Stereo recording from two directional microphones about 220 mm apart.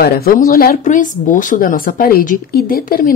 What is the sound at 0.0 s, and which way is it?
A woman's voice, 45° left (ahead or behind).